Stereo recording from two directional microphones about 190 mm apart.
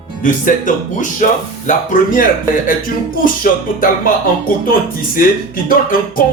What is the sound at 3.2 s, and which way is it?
Speech, 45° left (ahead or behind).